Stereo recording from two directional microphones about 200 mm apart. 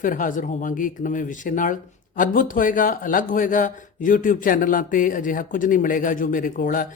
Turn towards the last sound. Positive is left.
turn(degrees=45)  # may be behind; listen again after turning